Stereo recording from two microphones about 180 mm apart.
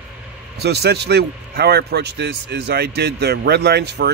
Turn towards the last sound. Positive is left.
turn(degrees=-65)  # may be behind; listen again after turning